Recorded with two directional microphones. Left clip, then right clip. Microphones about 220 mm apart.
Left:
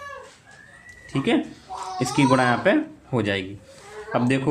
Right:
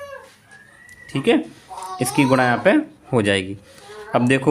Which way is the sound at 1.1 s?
20° right (ahead or behind).